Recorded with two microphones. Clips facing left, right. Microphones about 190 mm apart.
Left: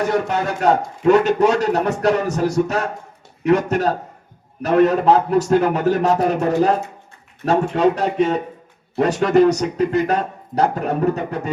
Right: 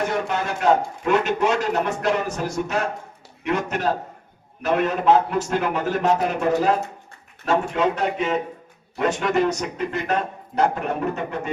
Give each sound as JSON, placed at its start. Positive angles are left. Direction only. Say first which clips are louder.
{"t": 0.1, "sound": "speech", "louder": "left 5 dB", "side_deg": 40}